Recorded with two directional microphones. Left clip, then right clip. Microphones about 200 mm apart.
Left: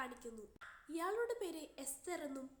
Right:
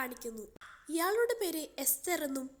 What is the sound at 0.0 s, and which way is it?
A woman's voice, 25° right (ahead or behind).